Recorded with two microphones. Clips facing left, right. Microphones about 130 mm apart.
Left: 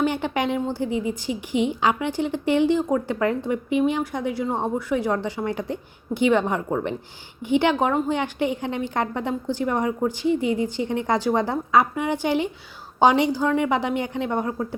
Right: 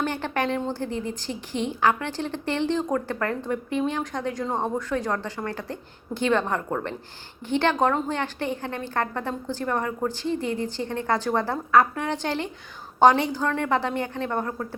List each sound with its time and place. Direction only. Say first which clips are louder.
0.0 s a woman's voice: left 3 dB; 15° left (ahead or behind)